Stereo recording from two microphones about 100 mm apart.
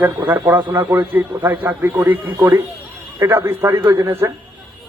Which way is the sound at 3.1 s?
25° right (ahead or behind).